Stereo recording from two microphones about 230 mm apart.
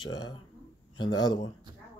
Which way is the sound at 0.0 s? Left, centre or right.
Centre.